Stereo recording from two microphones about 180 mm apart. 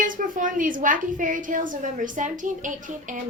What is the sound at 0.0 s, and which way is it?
A woman's voice, 45° right (ahead or behind).